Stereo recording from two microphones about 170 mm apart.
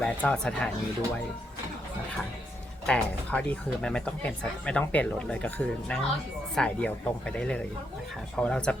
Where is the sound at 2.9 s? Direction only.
5° left (ahead or behind).